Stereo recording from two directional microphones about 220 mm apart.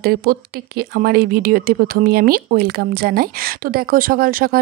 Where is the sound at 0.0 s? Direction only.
45° right (ahead or behind).